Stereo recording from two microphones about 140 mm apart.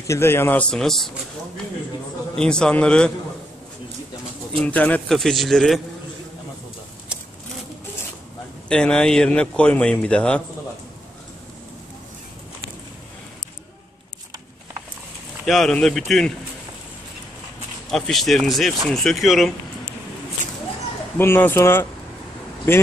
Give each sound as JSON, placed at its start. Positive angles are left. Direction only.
{"t": 0.0, "sound": "speech", "side_deg": 20}
{"t": 2.3, "sound": "a man's voice", "side_deg": 5}
{"t": 4.6, "sound": "a man's voice", "side_deg": 10}
{"t": 8.6, "sound": "speech", "side_deg": 5}
{"t": 15.4, "sound": "a man's voice", "side_deg": 0}
{"t": 17.9, "sound": "a man's voice", "side_deg": 0}
{"t": 21.2, "sound": "speech", "side_deg": 15}